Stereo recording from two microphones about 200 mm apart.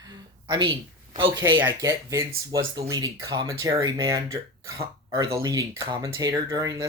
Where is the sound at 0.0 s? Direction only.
20° right (ahead or behind).